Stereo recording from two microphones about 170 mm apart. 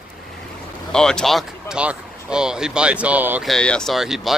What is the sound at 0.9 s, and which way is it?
Speech, 5° left (ahead or behind).